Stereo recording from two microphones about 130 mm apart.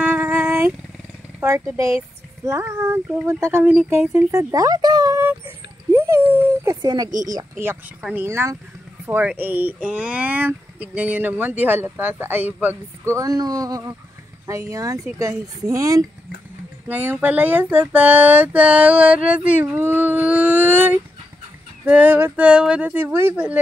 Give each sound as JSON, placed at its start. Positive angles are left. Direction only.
{"t": 0.0, "sound": "a sound", "side_deg": -15}
{"t": 2.4, "sound": "speech", "side_deg": -20}
{"t": 5.9, "sound": "dog", "side_deg": -20}
{"t": 6.8, "sound": "speech", "side_deg": -30}
{"t": 8.0, "sound": "speech", "side_deg": -15}
{"t": 16.8, "sound": "speech", "side_deg": -15}